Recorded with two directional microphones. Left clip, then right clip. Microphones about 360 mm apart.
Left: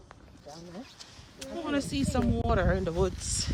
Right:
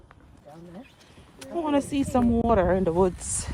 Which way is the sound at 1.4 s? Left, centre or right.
Centre.